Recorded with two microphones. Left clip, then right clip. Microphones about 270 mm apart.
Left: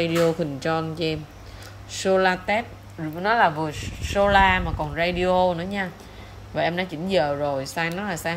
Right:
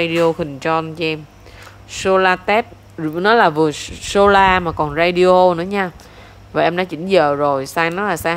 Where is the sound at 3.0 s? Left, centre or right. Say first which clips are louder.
Right 7 dB; right.